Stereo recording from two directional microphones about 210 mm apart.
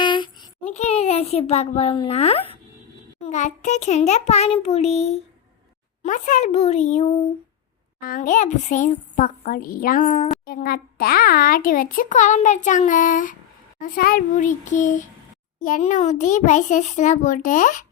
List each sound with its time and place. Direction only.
0.0 s a child's voice: 20° left (ahead or behind); by 17.8 s 40° left (ahead or behind)